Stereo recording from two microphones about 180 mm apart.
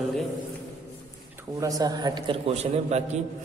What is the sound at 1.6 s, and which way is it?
A man's voice, 20° right (ahead or behind).